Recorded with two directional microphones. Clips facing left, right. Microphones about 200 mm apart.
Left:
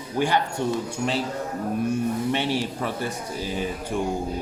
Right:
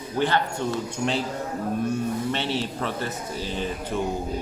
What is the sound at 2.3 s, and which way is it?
Speech, 15° left (ahead or behind).